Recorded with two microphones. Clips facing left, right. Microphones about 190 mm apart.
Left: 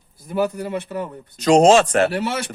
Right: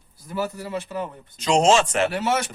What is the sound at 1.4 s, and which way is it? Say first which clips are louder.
Speech: left 6 dB; 40° left (ahead or behind).